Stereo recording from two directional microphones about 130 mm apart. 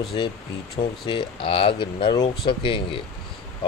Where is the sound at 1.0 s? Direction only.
40° left (ahead or behind).